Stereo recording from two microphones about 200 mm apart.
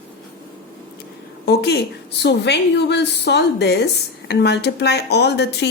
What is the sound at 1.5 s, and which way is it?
Speech, 55° left (ahead or behind).